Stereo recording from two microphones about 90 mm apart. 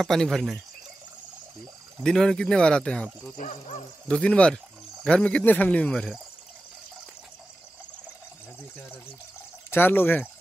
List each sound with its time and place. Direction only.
0.0 s speech: centre (ahead or behind)
2.0 s speech: 5° left (ahead or behind)
9.7 s speech: 20° left (ahead or behind)